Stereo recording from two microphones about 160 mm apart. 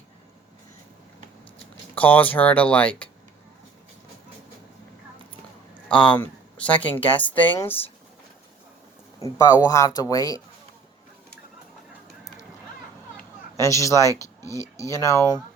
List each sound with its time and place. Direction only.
2.0 s a woman's voice: 10° left (ahead or behind)
6.1 s a woman's voice: 10° left (ahead or behind)
9.2 s speech: 20° left (ahead or behind)
13.6 s speech: 20° left (ahead or behind)